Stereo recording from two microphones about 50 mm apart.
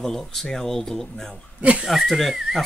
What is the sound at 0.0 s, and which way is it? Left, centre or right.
Speech, centre.